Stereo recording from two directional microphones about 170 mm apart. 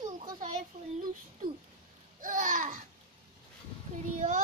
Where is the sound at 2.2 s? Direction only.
50° right (ahead or behind).